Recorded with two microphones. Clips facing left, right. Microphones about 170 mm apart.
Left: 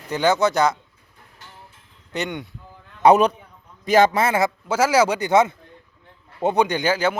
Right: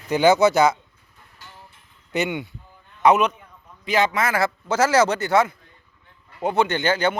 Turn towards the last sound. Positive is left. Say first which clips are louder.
# left 1 dB
turn(degrees=10)  # may be behind; listen again after turning